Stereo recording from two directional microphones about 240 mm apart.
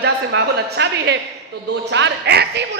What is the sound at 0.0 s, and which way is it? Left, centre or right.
A woman's voice, right.